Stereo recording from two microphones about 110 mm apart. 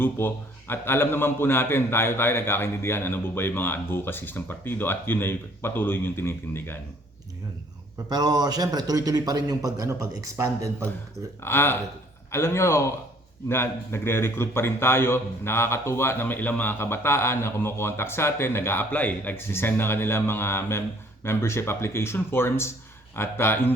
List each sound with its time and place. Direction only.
0.0 s a man's voice: 20° left (ahead or behind)
8.1 s a man's voice: 40° right (ahead or behind)
11.4 s a man's voice: 20° left (ahead or behind)